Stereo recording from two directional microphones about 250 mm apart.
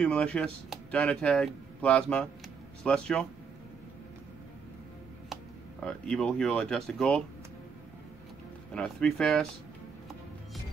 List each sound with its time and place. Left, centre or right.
0.0 s speech: centre
5.3 s speech: centre
8.7 s speech: centre